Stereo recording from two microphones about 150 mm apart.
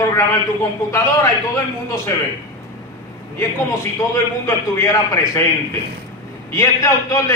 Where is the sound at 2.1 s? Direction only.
20° left (ahead or behind).